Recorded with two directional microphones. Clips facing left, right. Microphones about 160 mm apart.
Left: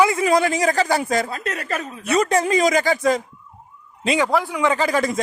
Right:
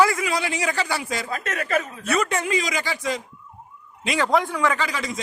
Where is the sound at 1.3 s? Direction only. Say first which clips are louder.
Right 2 dB; 35° left (ahead or behind).